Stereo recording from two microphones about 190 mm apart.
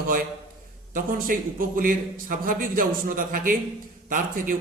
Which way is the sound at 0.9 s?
45° right (ahead or behind).